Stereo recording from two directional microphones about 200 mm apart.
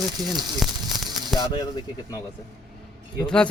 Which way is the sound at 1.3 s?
20° left (ahead or behind).